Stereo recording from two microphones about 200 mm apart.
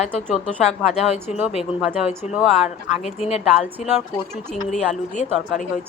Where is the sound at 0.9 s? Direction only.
30° left (ahead or behind).